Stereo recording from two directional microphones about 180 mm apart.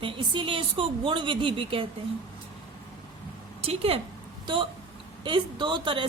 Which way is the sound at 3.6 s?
35° right (ahead or behind).